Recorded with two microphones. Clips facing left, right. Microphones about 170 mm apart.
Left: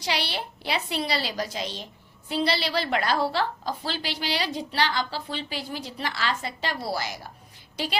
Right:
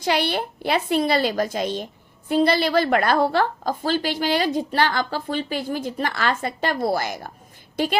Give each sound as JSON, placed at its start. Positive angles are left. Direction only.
{"t": 0.0, "sound": "a woman's voice", "side_deg": -50}